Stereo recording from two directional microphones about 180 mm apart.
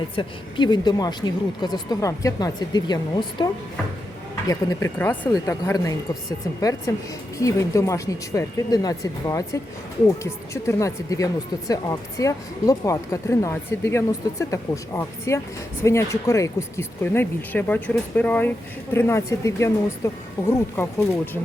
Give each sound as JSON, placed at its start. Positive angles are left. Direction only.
{"t": 0.2, "sound": "speech", "side_deg": 25}